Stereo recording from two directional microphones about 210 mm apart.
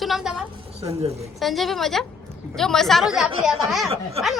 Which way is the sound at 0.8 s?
30° right (ahead or behind).